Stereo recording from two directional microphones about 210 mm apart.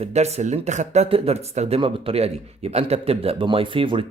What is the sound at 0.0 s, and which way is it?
Speech, 30° right (ahead or behind).